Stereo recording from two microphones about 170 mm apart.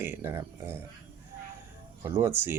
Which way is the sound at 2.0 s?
15° right (ahead or behind).